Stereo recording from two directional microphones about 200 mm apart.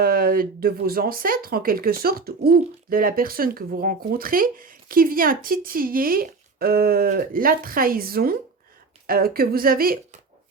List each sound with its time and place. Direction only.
0.0 s speech: 45° right (ahead or behind)